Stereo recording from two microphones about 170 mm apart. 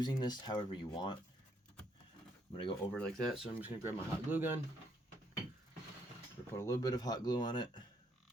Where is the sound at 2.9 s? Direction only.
5° left (ahead or behind).